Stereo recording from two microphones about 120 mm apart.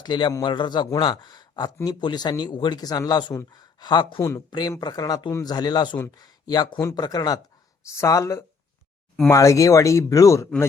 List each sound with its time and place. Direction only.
0.0 s speech: 40° left (ahead or behind)